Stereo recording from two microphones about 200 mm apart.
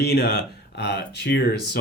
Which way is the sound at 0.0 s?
55° left (ahead or behind).